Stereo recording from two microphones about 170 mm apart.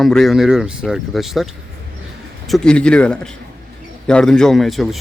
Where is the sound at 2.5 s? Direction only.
5° left (ahead or behind).